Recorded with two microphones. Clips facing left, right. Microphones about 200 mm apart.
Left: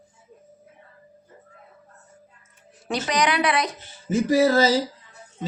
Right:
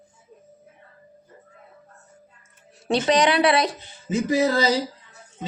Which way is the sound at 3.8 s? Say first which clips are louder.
Left 2 dB; 15° right (ahead or behind).